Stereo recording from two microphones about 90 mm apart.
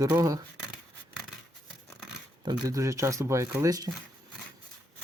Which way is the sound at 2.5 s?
40° right (ahead or behind).